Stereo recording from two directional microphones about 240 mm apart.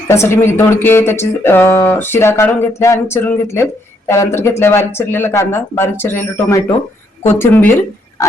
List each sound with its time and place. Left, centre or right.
0.1 s speech: centre